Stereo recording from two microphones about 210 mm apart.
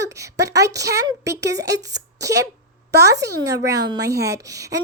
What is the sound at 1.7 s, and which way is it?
Speech, 55° right (ahead or behind).